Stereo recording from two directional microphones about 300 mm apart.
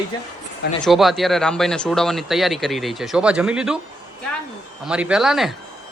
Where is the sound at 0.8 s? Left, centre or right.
Centre.